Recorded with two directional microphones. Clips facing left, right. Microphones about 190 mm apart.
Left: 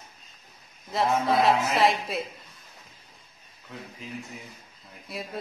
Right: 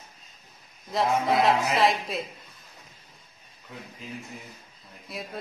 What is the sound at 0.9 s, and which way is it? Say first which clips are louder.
A man's voice: even; centre (ahead or behind).